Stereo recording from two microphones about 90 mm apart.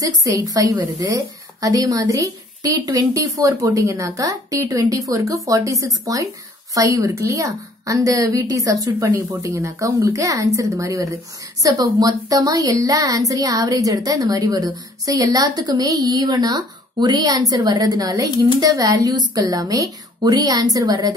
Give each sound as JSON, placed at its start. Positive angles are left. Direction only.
{"t": 0.0, "sound": "a woman's voice", "side_deg": -40}
{"t": 11.6, "sound": "a woman's voice", "side_deg": -50}